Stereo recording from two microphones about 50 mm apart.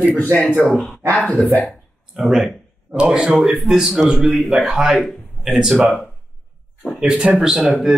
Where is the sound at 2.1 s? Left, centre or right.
Centre.